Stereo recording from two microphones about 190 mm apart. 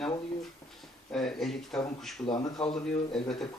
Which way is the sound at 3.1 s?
Centre (ahead or behind).